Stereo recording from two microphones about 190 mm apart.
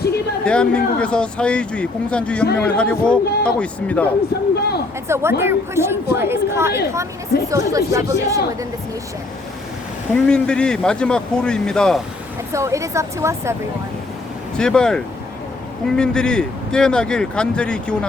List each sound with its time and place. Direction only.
0.4 s speech: 5° left (ahead or behind)
4.5 s a sound: 60° left (ahead or behind)
5.0 s a woman's voice: 15° right (ahead or behind)
10.2 s speech: 5° left (ahead or behind)
12.5 s a woman's voice: 15° right (ahead or behind)
14.6 s speech: 5° left (ahead or behind)